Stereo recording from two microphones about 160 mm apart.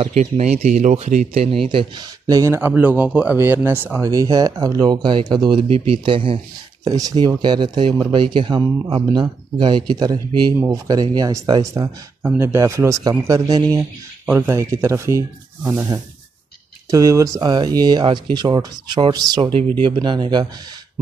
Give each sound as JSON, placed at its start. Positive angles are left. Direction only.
{"t": 0.0, "sound": "speech", "side_deg": -45}
{"t": 12.2, "sound": "speech", "side_deg": -10}
{"t": 14.2, "sound": "speech", "side_deg": -10}